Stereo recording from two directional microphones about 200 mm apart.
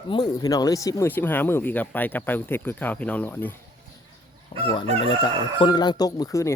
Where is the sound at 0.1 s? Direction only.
20° left (ahead or behind).